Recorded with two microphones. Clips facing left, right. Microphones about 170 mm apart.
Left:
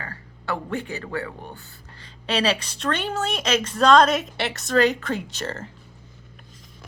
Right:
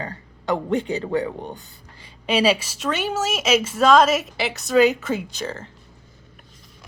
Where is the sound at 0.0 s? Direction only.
20° right (ahead or behind); by 5.7 s centre (ahead or behind).